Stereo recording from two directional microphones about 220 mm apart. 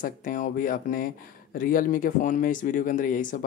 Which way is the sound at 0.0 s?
35° left (ahead or behind).